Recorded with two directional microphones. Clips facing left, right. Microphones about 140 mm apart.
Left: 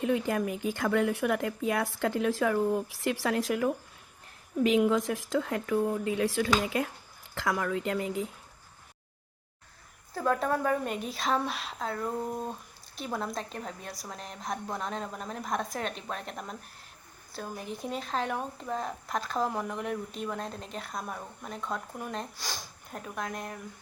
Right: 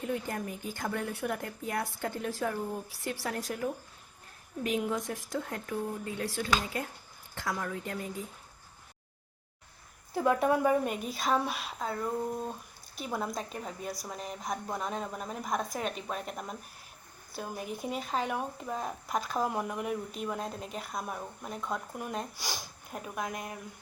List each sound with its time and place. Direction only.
0.0 s a woman's voice: 90° left
10.2 s speech: 15° right (ahead or behind)